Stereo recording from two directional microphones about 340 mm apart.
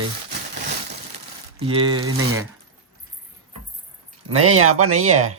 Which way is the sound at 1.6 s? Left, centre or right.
Centre.